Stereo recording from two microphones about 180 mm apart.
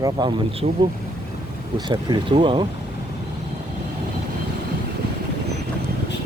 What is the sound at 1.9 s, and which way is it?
Speech, 25° right (ahead or behind).